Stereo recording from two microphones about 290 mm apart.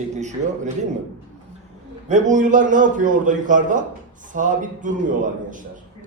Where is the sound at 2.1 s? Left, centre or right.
Right.